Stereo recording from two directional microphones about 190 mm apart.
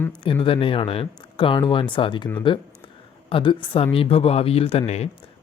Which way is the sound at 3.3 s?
25° left (ahead or behind).